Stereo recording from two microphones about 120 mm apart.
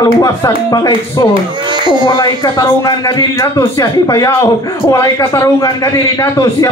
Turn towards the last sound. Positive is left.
turn(degrees=30)  # may be behind; listen again after turning